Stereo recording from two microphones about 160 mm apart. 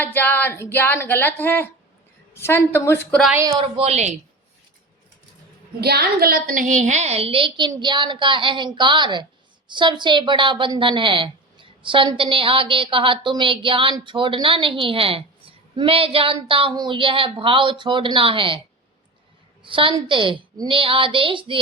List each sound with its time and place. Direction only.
0.0 s speech: 10° left (ahead or behind)
3.6 s a woman's voice: 40° right (ahead or behind)
5.8 s a woman's voice: 80° right; by 18.6 s 35° right (ahead or behind)
19.6 s a woman's voice: 30° right (ahead or behind)